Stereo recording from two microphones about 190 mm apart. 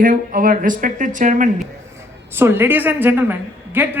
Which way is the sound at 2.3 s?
10° right (ahead or behind).